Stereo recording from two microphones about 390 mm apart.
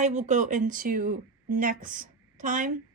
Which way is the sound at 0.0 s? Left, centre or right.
Centre.